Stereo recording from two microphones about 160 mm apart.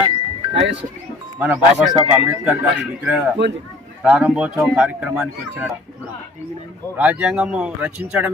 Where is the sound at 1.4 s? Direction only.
10° right (ahead or behind).